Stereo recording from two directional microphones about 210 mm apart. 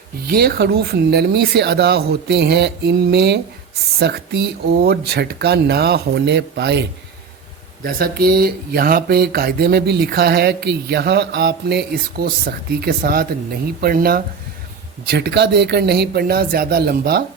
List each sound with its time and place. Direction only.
0.3 s speech: 45° right (ahead or behind)
7.9 s speech: 45° right (ahead or behind)